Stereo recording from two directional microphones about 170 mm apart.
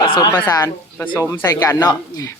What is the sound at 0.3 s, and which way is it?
Speech, 15° left (ahead or behind).